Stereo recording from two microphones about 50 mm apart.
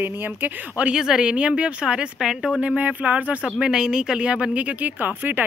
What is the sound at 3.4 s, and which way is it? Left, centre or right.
Speech, centre.